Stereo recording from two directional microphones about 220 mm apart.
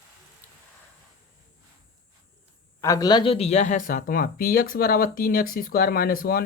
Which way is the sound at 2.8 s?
15° left (ahead or behind).